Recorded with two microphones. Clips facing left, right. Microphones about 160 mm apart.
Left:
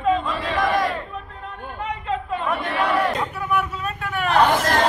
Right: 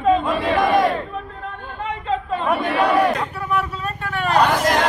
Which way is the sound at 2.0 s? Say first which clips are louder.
Right 3 dB; 30° right (ahead or behind).